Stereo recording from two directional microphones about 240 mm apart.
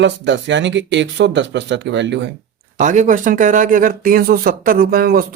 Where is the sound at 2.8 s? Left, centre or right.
Right.